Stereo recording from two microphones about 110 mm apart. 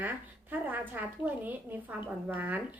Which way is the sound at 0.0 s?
15° right (ahead or behind).